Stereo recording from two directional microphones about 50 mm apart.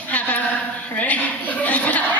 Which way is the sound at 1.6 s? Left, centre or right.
Left.